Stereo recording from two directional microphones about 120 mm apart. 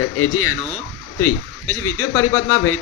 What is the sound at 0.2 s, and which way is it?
Speech, 20° left (ahead or behind).